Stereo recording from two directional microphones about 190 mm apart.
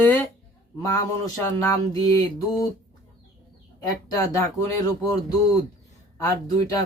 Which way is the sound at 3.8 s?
20° left (ahead or behind).